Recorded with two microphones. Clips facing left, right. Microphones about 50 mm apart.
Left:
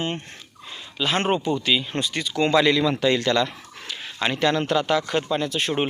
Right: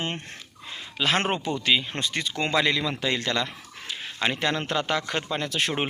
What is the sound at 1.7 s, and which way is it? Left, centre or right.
Speech, right.